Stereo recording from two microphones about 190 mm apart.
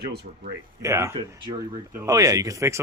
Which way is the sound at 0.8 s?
15° right (ahead or behind).